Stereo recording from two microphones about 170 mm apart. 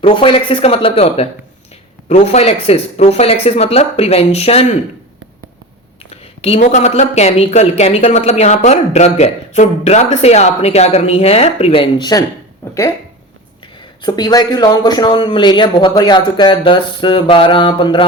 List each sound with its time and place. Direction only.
0.0 s speech: 30° left (ahead or behind)
6.4 s speech: 40° left (ahead or behind)
12.6 s a sound: 15° left (ahead or behind)
14.0 s speech: 25° left (ahead or behind)